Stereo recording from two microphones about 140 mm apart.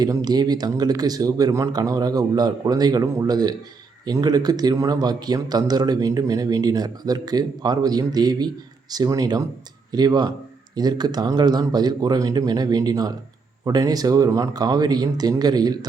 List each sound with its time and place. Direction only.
0.0 s speech: 30° right (ahead or behind)